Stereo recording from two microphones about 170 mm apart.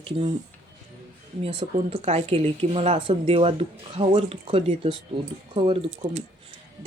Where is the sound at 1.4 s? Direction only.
35° right (ahead or behind).